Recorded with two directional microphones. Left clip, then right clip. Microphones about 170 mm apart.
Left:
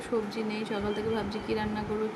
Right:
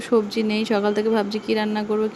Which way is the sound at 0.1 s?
55° right (ahead or behind).